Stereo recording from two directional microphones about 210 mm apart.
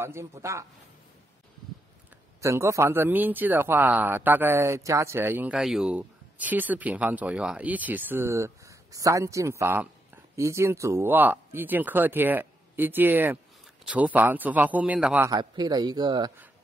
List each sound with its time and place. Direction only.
0.0 s speech: 15° right (ahead or behind)
2.4 s speech: 15° right (ahead or behind)